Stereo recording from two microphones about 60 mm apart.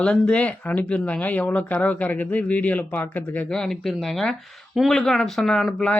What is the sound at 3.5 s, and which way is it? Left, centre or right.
Speech, centre.